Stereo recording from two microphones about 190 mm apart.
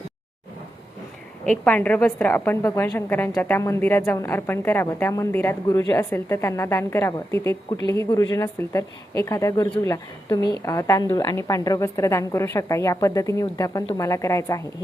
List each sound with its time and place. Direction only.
1.5 s a woman's voice: 10° left (ahead or behind)